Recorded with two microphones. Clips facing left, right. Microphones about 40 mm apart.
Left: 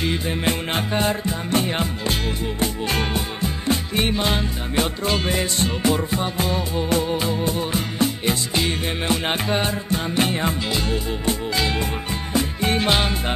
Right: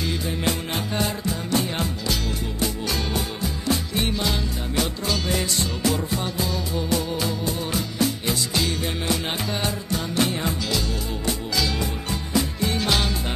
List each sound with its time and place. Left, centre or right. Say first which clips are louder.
0.0 s music: left 3 dB; left